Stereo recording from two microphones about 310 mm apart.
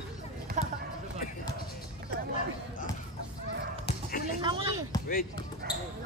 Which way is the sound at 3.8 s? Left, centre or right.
Left.